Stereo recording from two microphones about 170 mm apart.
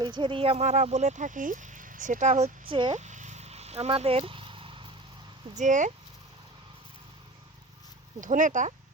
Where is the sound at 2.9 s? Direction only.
45° right (ahead or behind).